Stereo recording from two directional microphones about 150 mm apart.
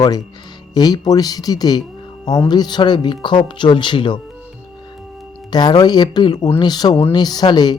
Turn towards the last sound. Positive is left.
turn(degrees=30)  # may be behind; listen again after turning